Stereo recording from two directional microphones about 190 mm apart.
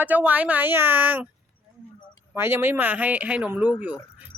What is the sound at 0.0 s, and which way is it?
Speech, 10° right (ahead or behind).